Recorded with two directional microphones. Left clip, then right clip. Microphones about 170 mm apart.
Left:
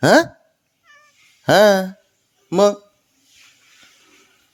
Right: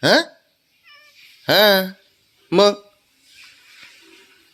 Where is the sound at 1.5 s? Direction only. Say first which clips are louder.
Left 2 dB; 30° left (ahead or behind).